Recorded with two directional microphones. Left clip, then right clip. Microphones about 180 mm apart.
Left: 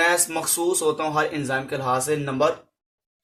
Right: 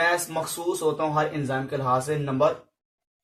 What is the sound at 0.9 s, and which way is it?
Speech, 40° left (ahead or behind).